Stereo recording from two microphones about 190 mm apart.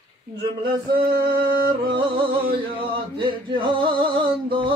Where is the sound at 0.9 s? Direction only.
55° right (ahead or behind).